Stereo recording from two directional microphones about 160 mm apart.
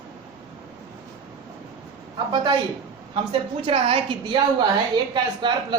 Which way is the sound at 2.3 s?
30° right (ahead or behind).